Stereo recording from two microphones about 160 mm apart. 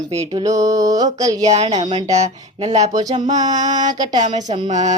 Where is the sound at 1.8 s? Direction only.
30° right (ahead or behind).